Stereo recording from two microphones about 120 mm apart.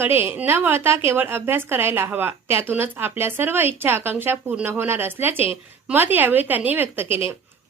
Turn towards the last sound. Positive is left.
turn(degrees=-15)  # may be behind; listen again after turning